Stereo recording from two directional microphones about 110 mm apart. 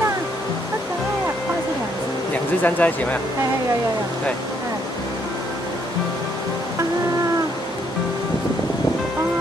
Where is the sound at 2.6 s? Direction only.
15° left (ahead or behind).